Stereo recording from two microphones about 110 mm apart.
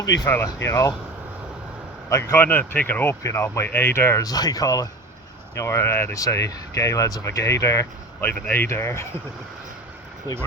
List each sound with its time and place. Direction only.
0.3 s speech: 25° left (ahead or behind)
2.0 s speech: 25° left (ahead or behind)
8.3 s speech: 15° left (ahead or behind)